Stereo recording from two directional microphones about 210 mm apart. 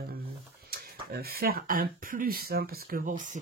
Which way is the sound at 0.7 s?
45° right (ahead or behind).